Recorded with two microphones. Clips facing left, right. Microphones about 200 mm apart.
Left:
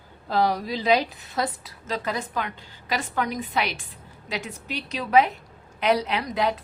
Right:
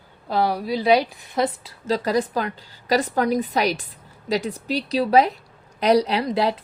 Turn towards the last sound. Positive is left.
turn(degrees=-30)  # may be behind; listen again after turning